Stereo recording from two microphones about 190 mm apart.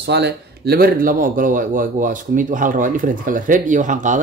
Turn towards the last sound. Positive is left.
turn(degrees=-40)  # may be behind; listen again after turning